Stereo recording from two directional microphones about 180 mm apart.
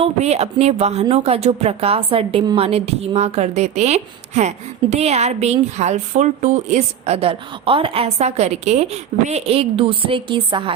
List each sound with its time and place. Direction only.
0.0 s speech: 35° right (ahead or behind)